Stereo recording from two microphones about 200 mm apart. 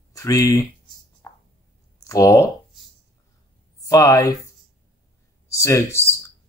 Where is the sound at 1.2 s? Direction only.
10° left (ahead or behind).